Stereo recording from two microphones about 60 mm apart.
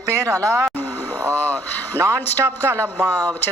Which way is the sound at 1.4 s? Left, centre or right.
Left.